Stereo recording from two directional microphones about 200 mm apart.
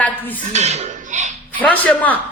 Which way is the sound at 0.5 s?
35° right (ahead or behind).